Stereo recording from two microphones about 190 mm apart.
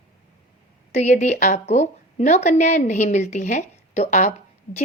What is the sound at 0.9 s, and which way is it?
Speech, 35° left (ahead or behind).